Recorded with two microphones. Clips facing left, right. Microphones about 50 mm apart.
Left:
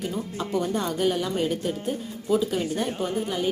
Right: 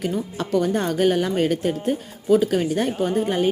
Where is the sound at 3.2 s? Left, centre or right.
Right.